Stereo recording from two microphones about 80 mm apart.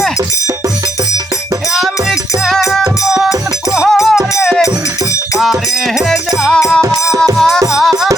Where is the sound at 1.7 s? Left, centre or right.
Centre.